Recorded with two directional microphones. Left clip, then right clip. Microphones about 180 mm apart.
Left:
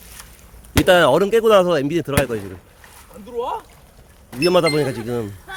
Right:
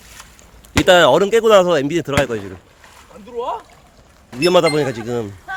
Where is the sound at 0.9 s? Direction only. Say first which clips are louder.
Right 3 dB; 10° right (ahead or behind).